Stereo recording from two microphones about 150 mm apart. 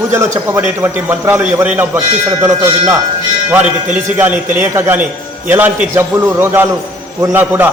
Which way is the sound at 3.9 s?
10° right (ahead or behind).